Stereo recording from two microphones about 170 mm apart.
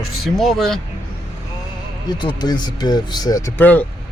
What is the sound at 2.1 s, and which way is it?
Speech, 25° left (ahead or behind).